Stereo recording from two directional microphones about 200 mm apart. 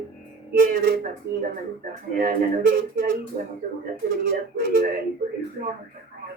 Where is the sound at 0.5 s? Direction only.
45° right (ahead or behind).